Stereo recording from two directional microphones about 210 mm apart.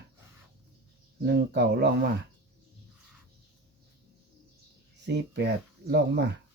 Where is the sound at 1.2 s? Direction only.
50° right (ahead or behind).